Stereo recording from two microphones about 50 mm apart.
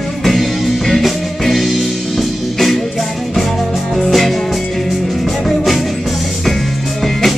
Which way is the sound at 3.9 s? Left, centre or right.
Centre.